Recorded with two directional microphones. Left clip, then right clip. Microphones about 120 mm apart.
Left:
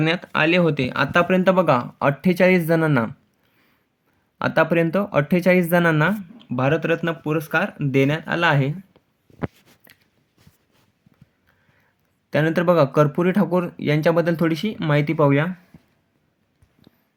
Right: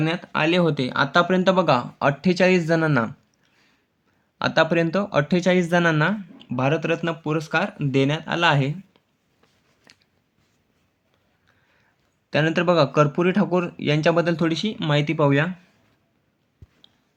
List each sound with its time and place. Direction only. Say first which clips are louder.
0.0 s speech: left 3 dB; 35° left (ahead or behind)
4.4 s speech: left 1 dB; 40° left (ahead or behind)
9.9 s a sound: right 1 dB; 35° left (ahead or behind)
12.3 s speech: left 1 dB; 40° left (ahead or behind)